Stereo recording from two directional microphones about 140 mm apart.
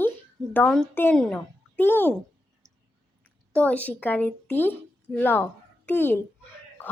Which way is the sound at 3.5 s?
10° left (ahead or behind).